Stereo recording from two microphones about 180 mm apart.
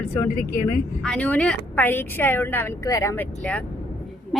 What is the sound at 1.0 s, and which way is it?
A woman's voice, 5° left (ahead or behind).